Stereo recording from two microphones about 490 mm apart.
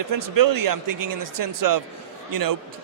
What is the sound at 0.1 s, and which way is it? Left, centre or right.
A man's voice, right.